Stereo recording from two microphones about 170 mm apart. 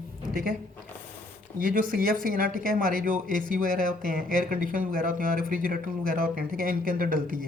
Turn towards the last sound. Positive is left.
turn(degrees=-55)  # may be behind; listen again after turning